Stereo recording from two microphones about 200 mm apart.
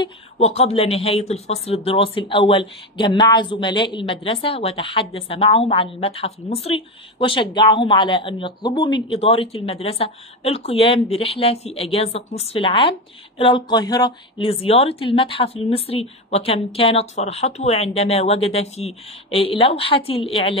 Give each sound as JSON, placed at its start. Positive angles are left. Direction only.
{"t": 0.0, "sound": "speech", "side_deg": 30}